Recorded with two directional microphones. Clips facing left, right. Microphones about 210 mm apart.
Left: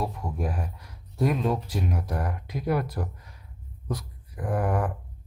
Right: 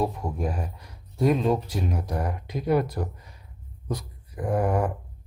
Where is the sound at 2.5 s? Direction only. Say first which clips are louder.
Right 4 dB; centre (ahead or behind).